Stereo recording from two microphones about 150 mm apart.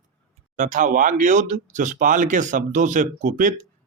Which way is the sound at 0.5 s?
55° right (ahead or behind).